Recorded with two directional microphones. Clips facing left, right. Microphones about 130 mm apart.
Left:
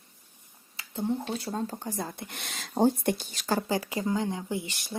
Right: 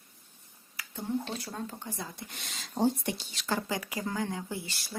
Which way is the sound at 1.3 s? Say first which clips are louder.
Left 6 dB; 30° left (ahead or behind).